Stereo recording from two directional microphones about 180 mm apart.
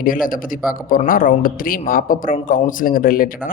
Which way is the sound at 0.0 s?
50° left (ahead or behind).